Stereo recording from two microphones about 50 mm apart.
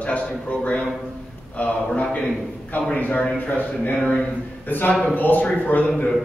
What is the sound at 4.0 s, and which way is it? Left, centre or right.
Speech, centre.